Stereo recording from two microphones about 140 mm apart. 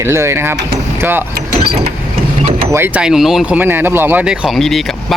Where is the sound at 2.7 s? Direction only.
15° right (ahead or behind).